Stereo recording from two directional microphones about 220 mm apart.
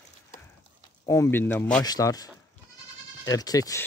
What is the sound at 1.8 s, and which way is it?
Speech, 15° left (ahead or behind).